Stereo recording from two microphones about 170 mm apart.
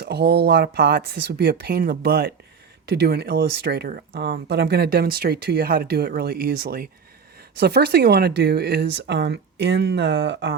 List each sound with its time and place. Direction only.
0.0 s speech: 75° right (ahead or behind)
7.6 s speech: 70° right (ahead or behind); by 10.5 s 90° right